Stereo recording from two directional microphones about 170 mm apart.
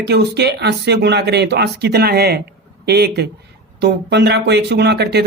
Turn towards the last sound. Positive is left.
turn(degrees=-75)  # may be behind; listen again after turning